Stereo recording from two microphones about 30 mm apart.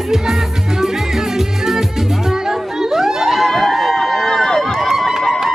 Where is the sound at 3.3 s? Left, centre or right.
Centre.